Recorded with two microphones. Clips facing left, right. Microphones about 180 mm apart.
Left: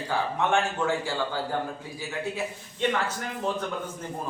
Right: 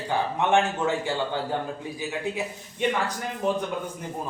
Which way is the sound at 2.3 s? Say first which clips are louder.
Right 1 dB; 15° right (ahead or behind).